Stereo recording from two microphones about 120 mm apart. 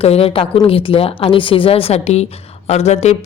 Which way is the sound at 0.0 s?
55° left (ahead or behind).